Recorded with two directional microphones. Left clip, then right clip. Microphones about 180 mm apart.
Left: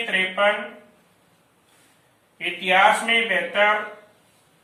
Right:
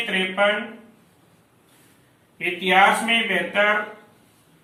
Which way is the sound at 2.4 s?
15° left (ahead or behind).